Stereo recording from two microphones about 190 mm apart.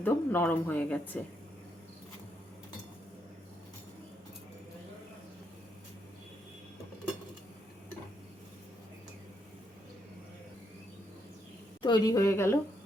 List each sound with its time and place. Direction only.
0.0 s a woman's voice: 10° left (ahead or behind)
11.8 s a woman's voice: 20° left (ahead or behind)